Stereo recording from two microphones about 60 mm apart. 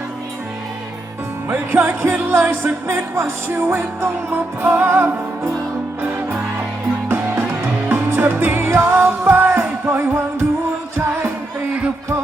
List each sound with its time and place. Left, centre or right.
1.5 s music: right
6.0 s music: right
7.1 s music: right
8.9 s music: right